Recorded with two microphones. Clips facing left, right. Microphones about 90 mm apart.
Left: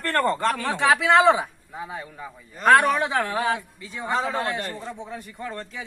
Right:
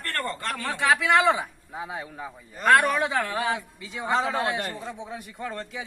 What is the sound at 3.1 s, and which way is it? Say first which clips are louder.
Speech: left 2 dB; 15° left (ahead or behind).